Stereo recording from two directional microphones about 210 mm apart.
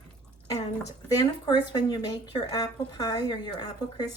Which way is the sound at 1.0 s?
20° left (ahead or behind).